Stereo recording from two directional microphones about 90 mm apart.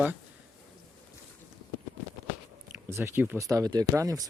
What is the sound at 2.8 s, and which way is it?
Speech, 30° right (ahead or behind).